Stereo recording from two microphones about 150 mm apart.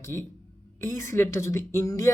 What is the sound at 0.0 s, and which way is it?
Speech, 15° left (ahead or behind).